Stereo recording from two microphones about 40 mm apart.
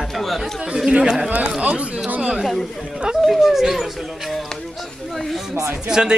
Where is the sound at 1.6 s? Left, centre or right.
Right.